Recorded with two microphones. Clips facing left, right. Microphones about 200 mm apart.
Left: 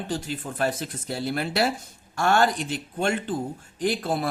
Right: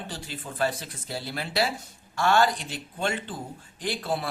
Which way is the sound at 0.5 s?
50° left (ahead or behind).